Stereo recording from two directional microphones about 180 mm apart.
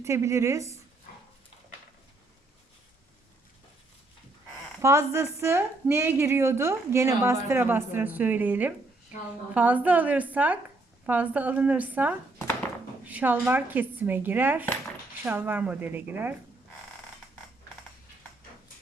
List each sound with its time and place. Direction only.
0.0 s a woman's voice: 15° right (ahead or behind)
4.8 s a woman's voice: 15° right (ahead or behind)